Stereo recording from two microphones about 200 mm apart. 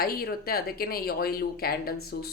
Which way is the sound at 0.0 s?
50° left (ahead or behind).